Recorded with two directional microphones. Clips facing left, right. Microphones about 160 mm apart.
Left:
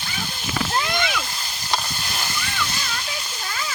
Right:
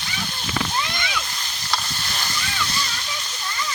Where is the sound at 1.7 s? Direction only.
10° left (ahead or behind).